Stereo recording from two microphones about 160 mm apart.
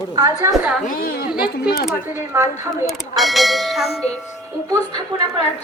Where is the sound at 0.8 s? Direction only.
60° left (ahead or behind).